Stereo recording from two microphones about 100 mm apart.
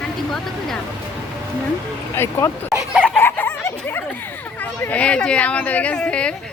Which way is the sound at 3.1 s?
15° left (ahead or behind).